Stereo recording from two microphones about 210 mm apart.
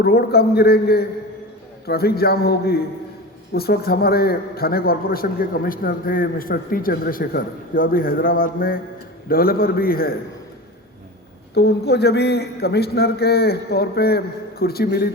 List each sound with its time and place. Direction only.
0.0 s a man's voice: 50° left (ahead or behind)
11.5 s a man's voice: 50° left (ahead or behind)